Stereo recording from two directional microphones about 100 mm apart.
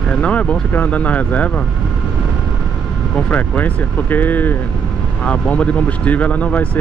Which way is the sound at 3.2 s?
15° left (ahead or behind).